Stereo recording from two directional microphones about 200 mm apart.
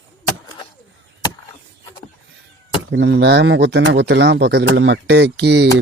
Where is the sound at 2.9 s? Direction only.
60° right (ahead or behind).